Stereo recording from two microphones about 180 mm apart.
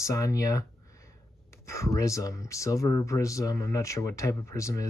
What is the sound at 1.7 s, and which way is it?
Speech, 15° left (ahead or behind).